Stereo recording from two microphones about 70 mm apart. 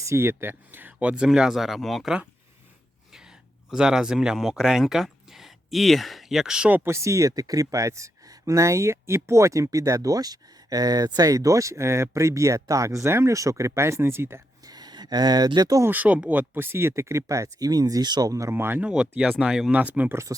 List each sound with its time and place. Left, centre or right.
0.0 s speech: right; by 2.0 s centre
3.7 s speech: centre
6.8 s speech: right
14.7 s speech: right
15.9 s speech: right
18.3 s speech: right
18.5 s speech: right
18.9 s speech: centre